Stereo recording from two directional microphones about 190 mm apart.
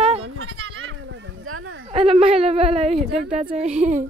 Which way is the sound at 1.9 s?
30° right (ahead or behind).